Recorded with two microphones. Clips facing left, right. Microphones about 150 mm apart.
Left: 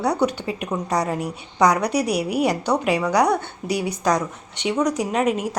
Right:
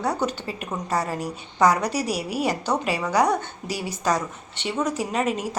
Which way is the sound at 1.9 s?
65° left (ahead or behind).